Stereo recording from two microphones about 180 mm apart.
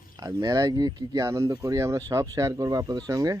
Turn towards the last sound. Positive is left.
turn(degrees=-20)  # may be behind; listen again after turning